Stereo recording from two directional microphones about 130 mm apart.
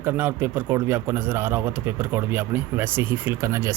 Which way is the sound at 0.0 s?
15° right (ahead or behind).